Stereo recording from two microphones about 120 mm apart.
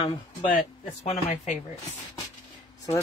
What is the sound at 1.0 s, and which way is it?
Speech, 65° left (ahead or behind).